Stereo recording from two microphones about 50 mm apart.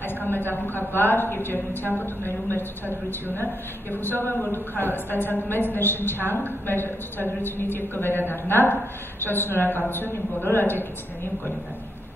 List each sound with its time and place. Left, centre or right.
0.2 s a sound: left
0.7 s a woman's voice: left
3.1 s a woman's voice: left